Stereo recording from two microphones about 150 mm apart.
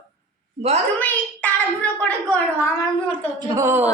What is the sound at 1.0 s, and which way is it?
A child's voice, 10° left (ahead or behind).